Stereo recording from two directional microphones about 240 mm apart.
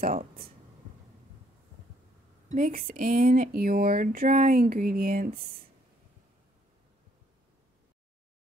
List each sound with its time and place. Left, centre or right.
0.0 s speech: right
2.5 s speech: right